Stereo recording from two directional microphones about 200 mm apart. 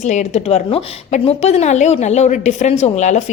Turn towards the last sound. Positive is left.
turn(degrees=35)  # may be behind; listen again after turning